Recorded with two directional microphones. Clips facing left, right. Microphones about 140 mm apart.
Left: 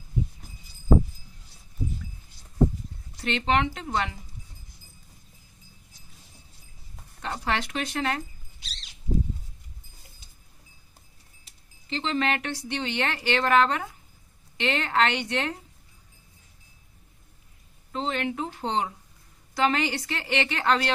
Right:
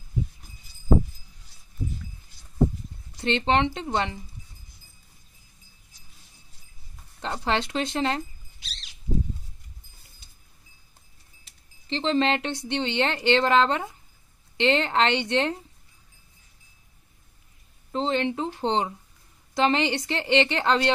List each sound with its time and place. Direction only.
3.2 s speech: 30° right (ahead or behind)
7.2 s speech: 25° right (ahead or behind)
11.9 s speech: 30° right (ahead or behind)
17.9 s speech: 30° right (ahead or behind)